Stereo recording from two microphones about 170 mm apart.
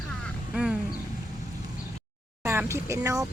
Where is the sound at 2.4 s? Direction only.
15° right (ahead or behind).